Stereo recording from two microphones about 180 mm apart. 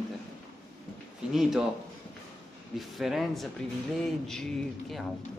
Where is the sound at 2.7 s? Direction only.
Centre (ahead or behind).